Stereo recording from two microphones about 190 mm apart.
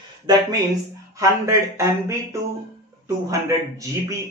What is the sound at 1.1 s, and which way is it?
Speech, 15° right (ahead or behind).